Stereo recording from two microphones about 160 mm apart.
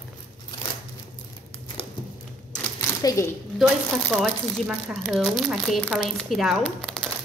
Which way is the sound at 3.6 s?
5° right (ahead or behind).